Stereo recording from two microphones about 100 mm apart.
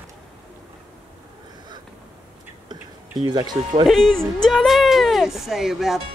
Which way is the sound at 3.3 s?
45° right (ahead or behind).